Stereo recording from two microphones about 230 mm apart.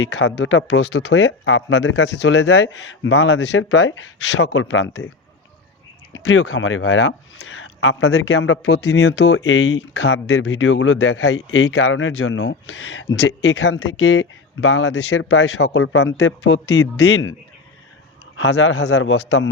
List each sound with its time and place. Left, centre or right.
0.3 s speech: left
6.1 s speech: left
9.1 s speech: left
9.4 s speech: left
10.1 s speech: left
18.3 s speech: left